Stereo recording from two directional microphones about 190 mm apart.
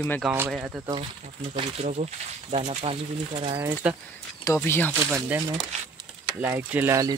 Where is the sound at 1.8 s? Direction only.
35° right (ahead or behind).